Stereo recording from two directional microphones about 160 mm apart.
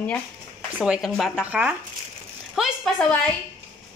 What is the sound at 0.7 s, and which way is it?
A woman's voice, 5° right (ahead or behind).